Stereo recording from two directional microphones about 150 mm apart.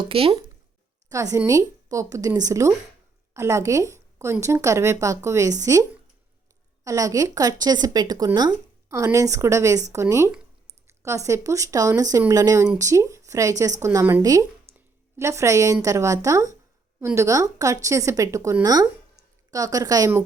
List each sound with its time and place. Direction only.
0.1 s speech: 40° right (ahead or behind)
1.1 s speech: 20° right (ahead or behind)
6.8 s speech: 20° right (ahead or behind)